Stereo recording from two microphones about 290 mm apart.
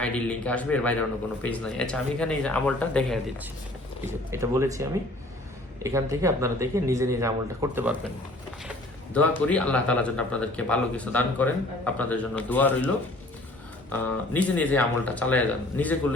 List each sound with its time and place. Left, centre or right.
0.0 s speech: centre
4.0 s speech: centre
9.1 s speech: centre
13.9 s speech: centre